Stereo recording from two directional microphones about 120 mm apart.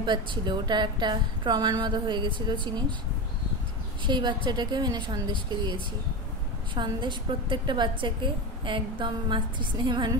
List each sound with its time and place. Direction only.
0.0 s a woman's voice: 40° right (ahead or behind)
4.0 s a woman's voice: 40° right (ahead or behind)
6.7 s a woman's voice: 40° right (ahead or behind)